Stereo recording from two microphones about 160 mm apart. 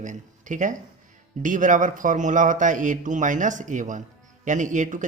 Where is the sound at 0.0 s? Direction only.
50° right (ahead or behind).